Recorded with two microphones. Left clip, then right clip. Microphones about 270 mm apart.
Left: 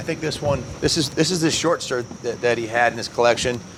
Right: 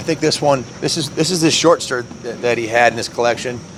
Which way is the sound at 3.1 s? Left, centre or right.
Centre.